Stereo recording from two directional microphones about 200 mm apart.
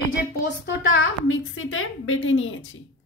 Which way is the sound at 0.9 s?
80° left.